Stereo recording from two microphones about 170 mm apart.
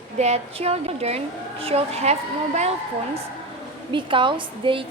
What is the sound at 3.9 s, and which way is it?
Speech, 30° right (ahead or behind).